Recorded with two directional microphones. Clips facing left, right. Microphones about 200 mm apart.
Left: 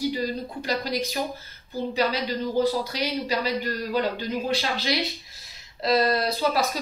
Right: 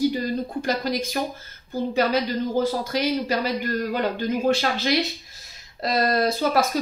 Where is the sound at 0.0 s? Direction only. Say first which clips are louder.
Right 4 dB; 50° right (ahead or behind).